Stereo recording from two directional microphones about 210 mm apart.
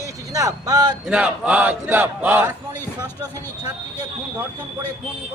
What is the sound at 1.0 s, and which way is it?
A man's voice, 5° right (ahead or behind).